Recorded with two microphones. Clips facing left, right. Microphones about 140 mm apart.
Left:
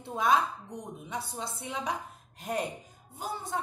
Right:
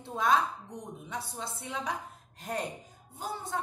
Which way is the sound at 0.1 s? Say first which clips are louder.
Left 1 dB; 10° left (ahead or behind).